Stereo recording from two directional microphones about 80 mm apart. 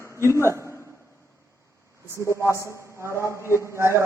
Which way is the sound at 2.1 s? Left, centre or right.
Left.